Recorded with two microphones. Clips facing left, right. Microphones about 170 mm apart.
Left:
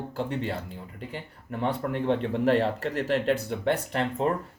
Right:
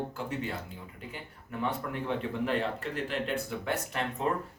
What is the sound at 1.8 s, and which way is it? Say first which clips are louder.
Speech: left 7 dB; 50° left (ahead or behind).